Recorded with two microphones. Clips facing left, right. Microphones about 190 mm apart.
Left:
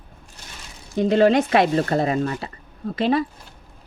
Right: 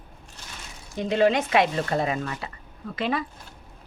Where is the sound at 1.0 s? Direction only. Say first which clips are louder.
Left 5 dB; 40° left (ahead or behind).